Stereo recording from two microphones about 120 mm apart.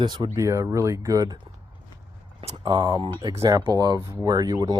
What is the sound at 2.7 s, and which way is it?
Speech, 30° right (ahead or behind).